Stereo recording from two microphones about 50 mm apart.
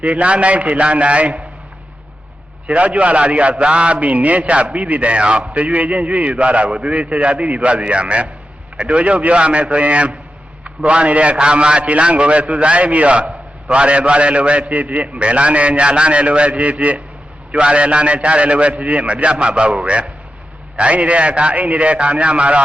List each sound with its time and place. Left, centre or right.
0.0 s a man's voice: right
2.6 s a man's voice: right